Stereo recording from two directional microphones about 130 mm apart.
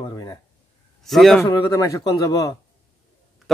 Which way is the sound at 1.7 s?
25° left (ahead or behind).